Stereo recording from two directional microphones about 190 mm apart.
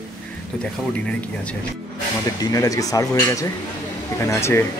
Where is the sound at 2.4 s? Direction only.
20° left (ahead or behind).